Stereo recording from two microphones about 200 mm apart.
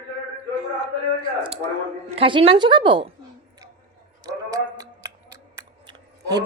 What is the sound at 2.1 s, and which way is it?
Speech, 30° right (ahead or behind).